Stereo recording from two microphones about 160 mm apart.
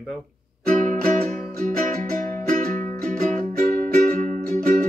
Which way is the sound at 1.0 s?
60° right (ahead or behind).